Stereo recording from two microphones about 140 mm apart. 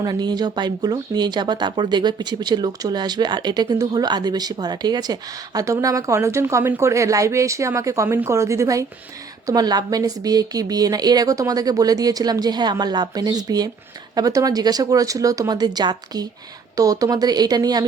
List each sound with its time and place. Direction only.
0.0 s a woman's voice: 30° right (ahead or behind)